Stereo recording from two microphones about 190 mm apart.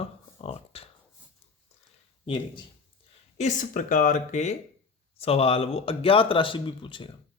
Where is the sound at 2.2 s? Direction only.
25° left (ahead or behind).